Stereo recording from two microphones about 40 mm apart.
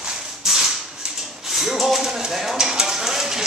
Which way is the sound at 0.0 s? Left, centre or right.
Centre.